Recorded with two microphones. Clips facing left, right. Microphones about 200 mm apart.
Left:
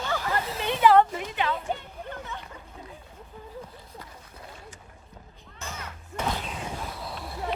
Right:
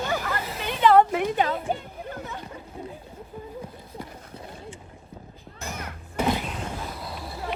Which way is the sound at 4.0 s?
30° right (ahead or behind).